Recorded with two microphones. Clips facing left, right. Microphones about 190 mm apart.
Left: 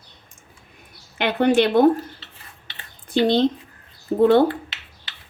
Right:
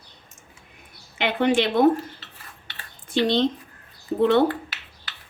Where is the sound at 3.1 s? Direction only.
50° left (ahead or behind).